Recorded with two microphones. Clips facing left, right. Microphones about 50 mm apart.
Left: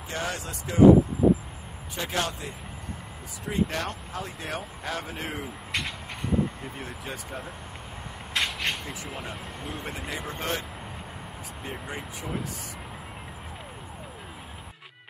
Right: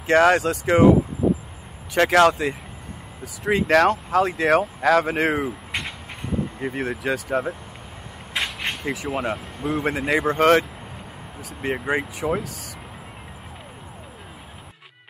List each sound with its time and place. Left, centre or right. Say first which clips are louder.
0.0 s speech: right 16 dB; right
2.0 s speech: right 14 dB; right
5.7 s vehicle: right 2 dB; centre
6.6 s speech: right 11 dB; right
8.3 s a sound: right 2 dB; centre
8.8 s speech: right 11 dB; right
11.6 s speech: right 13 dB; right